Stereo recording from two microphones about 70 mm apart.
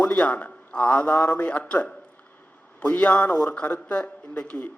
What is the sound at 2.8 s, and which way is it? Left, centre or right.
Speech, left.